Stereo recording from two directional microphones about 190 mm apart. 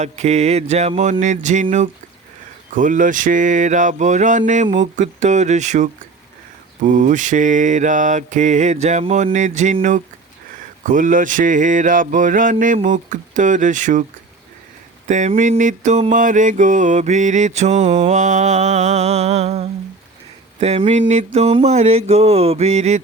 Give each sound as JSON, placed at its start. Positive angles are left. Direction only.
{"t": 0.0, "sound": "mantra", "side_deg": -35}
{"t": 2.7, "sound": "mantra", "side_deg": -45}
{"t": 10.8, "sound": "mantra", "side_deg": -45}
{"t": 15.0, "sound": "mantra", "side_deg": -40}